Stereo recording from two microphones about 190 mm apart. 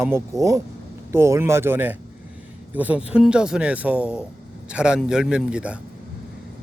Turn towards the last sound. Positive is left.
turn(degrees=-5)  # may be behind; listen again after turning